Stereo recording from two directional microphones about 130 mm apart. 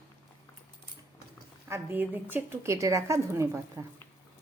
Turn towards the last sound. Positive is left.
turn(degrees=-20)  # may be behind; listen again after turning